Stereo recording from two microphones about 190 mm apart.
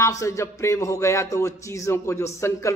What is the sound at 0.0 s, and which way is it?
A man's voice, 15° left (ahead or behind).